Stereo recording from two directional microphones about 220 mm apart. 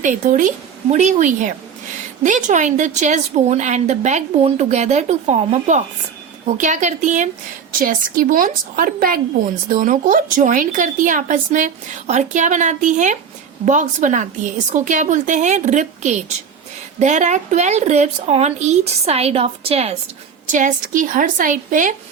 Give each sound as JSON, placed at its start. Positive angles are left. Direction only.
{"t": 0.0, "sound": "a woman's voice", "side_deg": -35}